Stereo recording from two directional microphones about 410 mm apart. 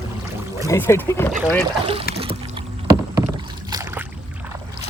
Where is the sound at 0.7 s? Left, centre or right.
Centre.